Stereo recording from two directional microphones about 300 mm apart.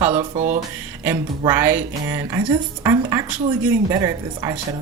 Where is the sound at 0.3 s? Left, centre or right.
Right.